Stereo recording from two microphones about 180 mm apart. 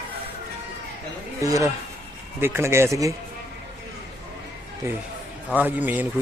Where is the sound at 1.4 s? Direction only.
20° right (ahead or behind).